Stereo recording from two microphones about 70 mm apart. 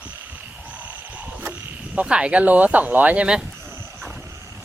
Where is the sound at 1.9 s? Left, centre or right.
Centre.